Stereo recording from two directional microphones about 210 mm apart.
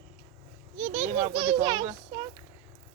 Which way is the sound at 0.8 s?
35° right (ahead or behind).